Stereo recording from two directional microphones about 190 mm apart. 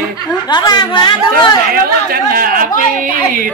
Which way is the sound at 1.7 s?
50° right (ahead or behind).